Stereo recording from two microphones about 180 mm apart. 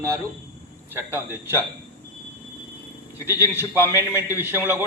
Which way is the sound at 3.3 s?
15° left (ahead or behind).